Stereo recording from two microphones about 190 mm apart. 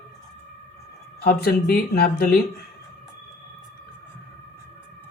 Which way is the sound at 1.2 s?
50° left (ahead or behind).